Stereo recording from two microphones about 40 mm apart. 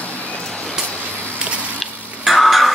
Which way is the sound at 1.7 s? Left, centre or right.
Centre.